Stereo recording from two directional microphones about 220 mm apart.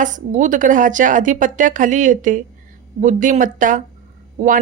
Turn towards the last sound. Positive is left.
turn(degrees=-35)  # may be behind; listen again after turning